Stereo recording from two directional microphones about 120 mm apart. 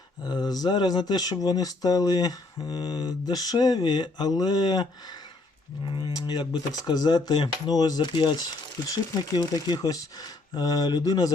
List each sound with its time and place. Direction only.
0.3 s speech: 35° left (ahead or behind)